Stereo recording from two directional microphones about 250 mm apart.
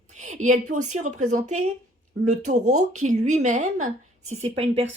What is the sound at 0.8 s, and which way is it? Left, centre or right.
Speech, right.